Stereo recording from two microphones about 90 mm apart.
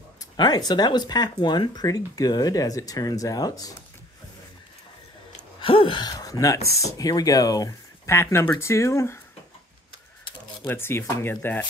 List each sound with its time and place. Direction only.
0.4 s speech: 50° left (ahead or behind)
5.6 s speech: 75° left (ahead or behind); by 7.7 s 40° left (ahead or behind)
8.1 s speech: 30° left (ahead or behind)
10.7 s speech: 25° left (ahead or behind)